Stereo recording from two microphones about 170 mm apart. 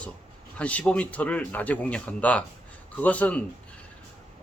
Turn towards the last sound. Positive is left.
turn(degrees=10)  # may be behind; listen again after turning